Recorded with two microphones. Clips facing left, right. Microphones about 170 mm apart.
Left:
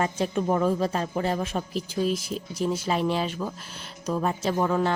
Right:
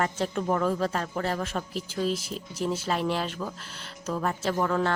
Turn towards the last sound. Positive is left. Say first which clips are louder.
# left 2 dB
turn(degrees=15)  # may be behind; listen again after turning